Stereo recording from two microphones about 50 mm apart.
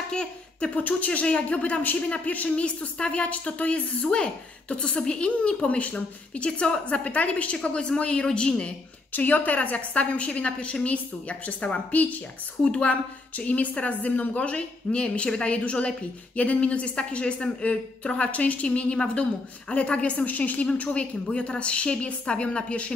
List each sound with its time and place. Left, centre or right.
0.1 s speech: centre
0.7 s speech: left
9.1 s speech: left